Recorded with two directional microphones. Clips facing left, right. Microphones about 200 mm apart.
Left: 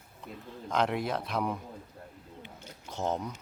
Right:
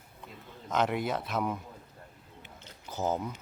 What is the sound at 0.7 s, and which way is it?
Speech, centre (ahead or behind).